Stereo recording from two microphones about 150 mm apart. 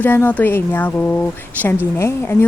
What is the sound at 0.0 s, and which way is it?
Speech, 10° left (ahead or behind).